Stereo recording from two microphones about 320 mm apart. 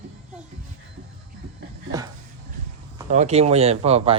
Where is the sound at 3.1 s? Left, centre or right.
Right.